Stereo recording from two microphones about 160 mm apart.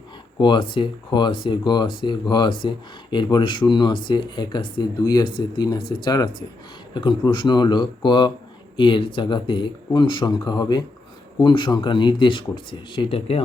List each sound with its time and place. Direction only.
0.3 s speech: 30° left (ahead or behind)